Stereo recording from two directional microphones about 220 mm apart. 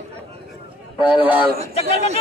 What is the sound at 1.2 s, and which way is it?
Speech, 5° right (ahead or behind).